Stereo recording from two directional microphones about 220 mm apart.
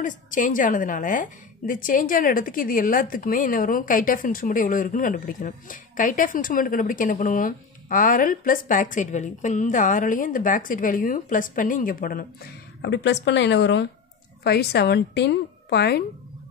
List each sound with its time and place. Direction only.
0.0 s a woman's voice: 35° left (ahead or behind)